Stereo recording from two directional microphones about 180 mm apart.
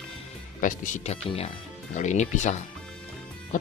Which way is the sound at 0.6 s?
35° left (ahead or behind).